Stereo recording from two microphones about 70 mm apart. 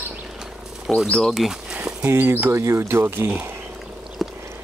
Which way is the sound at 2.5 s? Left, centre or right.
Right.